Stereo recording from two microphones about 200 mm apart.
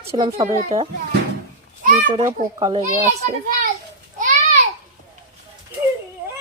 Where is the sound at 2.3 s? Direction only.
20° right (ahead or behind).